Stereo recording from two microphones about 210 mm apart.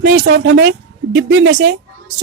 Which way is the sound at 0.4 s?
55° right (ahead or behind).